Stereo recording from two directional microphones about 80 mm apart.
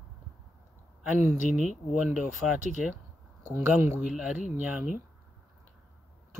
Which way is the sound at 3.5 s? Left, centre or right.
Right.